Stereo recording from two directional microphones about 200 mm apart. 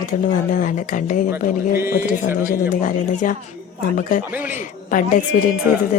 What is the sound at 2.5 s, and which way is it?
Speech, 45° left (ahead or behind).